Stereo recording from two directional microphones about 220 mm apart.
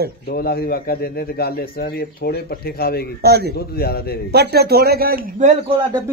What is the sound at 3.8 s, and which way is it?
Speech, 45° left (ahead or behind).